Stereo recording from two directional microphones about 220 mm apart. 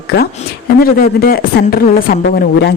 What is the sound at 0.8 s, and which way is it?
A woman's voice, 45° left (ahead or behind).